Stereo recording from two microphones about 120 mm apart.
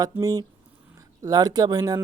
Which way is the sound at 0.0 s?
30° right (ahead or behind).